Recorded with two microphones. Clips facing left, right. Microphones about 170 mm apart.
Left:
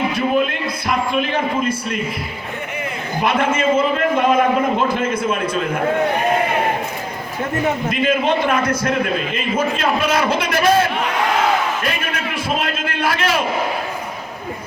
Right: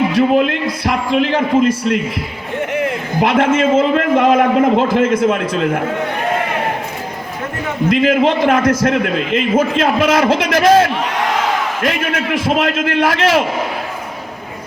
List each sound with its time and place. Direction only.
0.1 s a man's voice: 90° right
7.9 s a man's voice: 90° right